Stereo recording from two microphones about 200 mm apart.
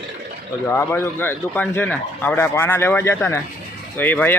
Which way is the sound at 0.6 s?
15° left (ahead or behind).